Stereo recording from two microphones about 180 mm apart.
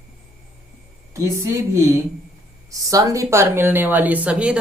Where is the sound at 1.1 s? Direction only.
15° right (ahead or behind).